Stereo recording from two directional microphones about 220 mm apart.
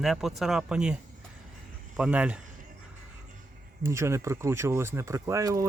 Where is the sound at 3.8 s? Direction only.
10° right (ahead or behind).